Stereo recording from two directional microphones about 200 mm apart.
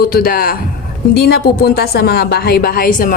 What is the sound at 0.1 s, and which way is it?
A woman's voice, 50° left (ahead or behind).